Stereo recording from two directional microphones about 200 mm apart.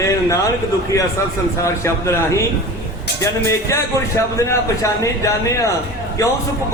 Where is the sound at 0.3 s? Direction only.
15° left (ahead or behind).